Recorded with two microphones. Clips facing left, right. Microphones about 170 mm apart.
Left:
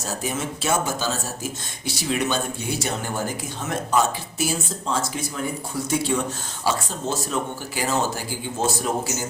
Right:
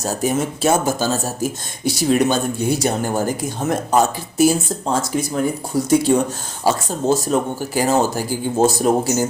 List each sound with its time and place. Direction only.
0.0 s speech: 40° right (ahead or behind)